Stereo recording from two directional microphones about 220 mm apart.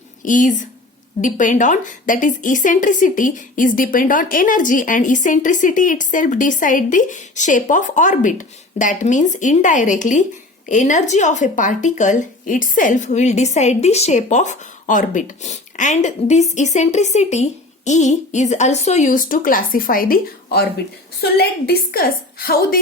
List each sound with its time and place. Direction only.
0.3 s a woman's voice: 35° left (ahead or behind)